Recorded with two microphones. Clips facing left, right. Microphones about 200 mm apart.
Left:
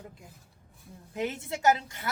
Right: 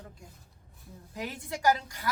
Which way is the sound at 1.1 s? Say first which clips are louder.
Left 5 dB; 25° left (ahead or behind).